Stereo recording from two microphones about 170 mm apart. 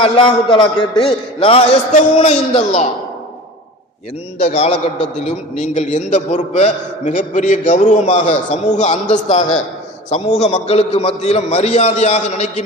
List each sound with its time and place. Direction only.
0.0 s a man's voice: 30° left (ahead or behind)
4.4 s a man's voice: 40° left (ahead or behind)